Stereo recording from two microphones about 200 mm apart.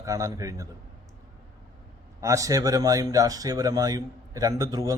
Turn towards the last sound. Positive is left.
turn(degrees=-15)  # may be behind; listen again after turning